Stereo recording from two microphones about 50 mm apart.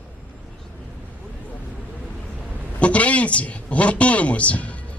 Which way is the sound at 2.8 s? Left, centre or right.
Left.